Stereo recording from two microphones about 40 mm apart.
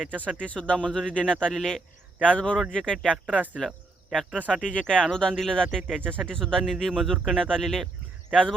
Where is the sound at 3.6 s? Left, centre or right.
Centre.